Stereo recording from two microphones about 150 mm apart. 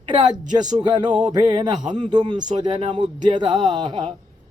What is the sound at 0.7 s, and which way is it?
Speech, 30° right (ahead or behind).